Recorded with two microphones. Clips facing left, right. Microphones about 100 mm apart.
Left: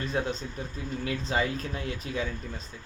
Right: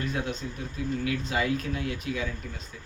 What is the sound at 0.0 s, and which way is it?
Speech, 30° left (ahead or behind).